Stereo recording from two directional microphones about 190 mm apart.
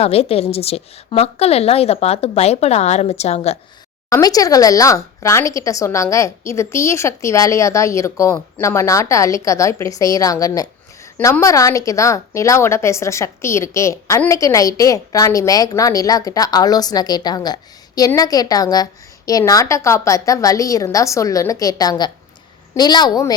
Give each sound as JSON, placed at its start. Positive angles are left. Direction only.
{"t": 0.0, "sound": "a woman's voice", "side_deg": 30}
{"t": 4.1, "sound": "a woman's voice", "side_deg": 20}